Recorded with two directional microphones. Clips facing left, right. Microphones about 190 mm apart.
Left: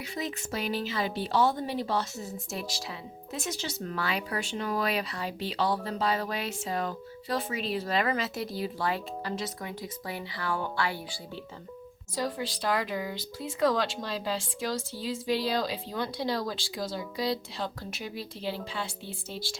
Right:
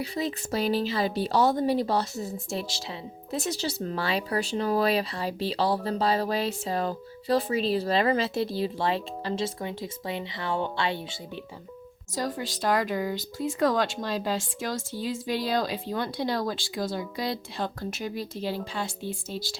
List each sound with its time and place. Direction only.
0.0 s speech: 35° right (ahead or behind)
12.1 s speech: 45° right (ahead or behind)